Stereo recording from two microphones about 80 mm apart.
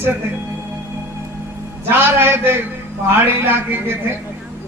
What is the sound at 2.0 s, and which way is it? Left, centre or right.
A woman's voice, right.